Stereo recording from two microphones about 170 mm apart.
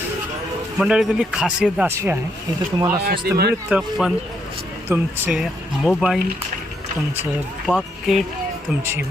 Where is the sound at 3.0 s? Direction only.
60° right (ahead or behind).